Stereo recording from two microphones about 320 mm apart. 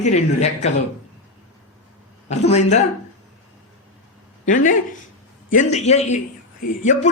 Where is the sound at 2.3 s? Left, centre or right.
Left.